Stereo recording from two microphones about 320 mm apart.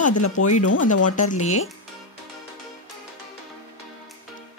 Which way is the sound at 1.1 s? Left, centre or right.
Left.